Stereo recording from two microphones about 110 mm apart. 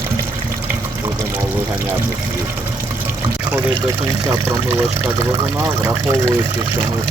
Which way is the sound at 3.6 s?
35° right (ahead or behind).